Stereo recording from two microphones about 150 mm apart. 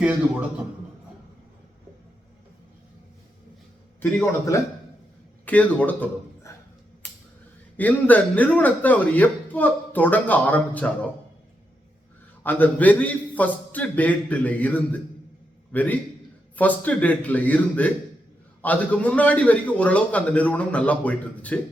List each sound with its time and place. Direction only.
0.0 s a man's voice: 10° right (ahead or behind)
4.0 s a man's voice: 15° left (ahead or behind)
7.8 s speech: 10° left (ahead or behind)
12.4 s a man's voice: 10° left (ahead or behind)